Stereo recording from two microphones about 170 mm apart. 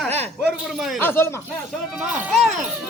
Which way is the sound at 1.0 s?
15° left (ahead or behind).